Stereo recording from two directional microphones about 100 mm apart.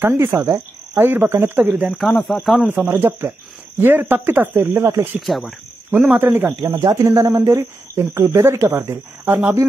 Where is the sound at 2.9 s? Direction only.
25° right (ahead or behind).